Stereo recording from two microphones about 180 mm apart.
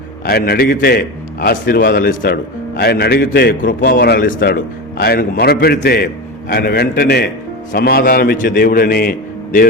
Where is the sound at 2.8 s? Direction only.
60° left (ahead or behind).